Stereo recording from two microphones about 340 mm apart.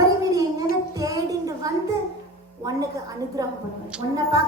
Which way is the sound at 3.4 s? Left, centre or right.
Centre.